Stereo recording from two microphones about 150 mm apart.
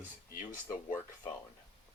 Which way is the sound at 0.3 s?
65° left (ahead or behind).